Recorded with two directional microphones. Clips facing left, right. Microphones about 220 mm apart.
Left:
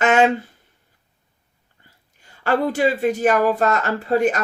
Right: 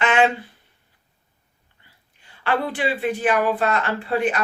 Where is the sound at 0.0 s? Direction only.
45° left (ahead or behind).